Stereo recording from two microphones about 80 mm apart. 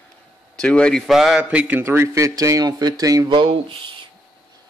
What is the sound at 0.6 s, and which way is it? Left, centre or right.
Speech, centre.